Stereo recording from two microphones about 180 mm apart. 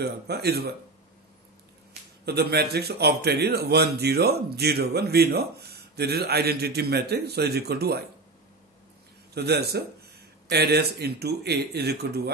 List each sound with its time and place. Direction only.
0.0 s a man's voice: 60° right (ahead or behind)
2.2 s a man's voice: 65° right (ahead or behind)
9.3 s a man's voice: 65° right (ahead or behind)